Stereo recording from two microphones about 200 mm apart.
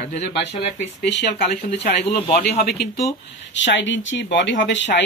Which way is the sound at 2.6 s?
55° left (ahead or behind).